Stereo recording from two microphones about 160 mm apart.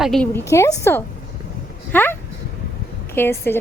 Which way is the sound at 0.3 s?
15° left (ahead or behind).